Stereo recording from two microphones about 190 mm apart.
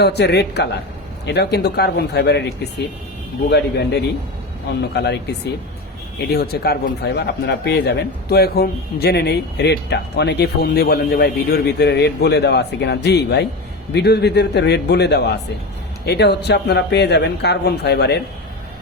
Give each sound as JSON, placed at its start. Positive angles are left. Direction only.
{"t": 0.0, "sound": "speech", "side_deg": 60}
{"t": 3.5, "sound": "speech", "side_deg": 60}
{"t": 6.3, "sound": "speech", "side_deg": 55}